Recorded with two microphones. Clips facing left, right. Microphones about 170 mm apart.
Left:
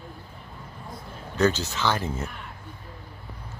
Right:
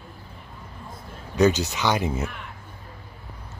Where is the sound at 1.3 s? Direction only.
15° right (ahead or behind).